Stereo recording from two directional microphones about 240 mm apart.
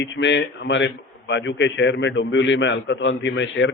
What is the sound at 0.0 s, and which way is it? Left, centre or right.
A man's voice, left.